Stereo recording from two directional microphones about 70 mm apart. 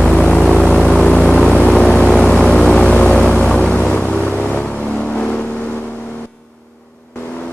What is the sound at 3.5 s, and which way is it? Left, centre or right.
Boat, centre.